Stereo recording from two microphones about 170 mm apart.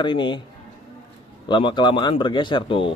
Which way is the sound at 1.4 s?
25° left (ahead or behind).